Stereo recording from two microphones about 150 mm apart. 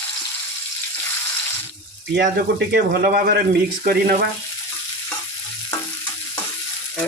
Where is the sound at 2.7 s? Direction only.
90° right.